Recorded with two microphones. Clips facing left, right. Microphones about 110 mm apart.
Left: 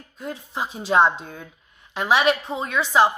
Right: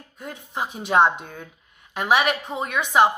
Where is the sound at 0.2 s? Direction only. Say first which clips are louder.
Left 1 dB; 50° right (ahead or behind).